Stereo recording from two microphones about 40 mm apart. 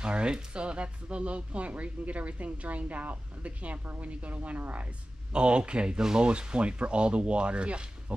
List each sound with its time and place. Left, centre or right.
0.0 s speech: right
5.3 s speech: right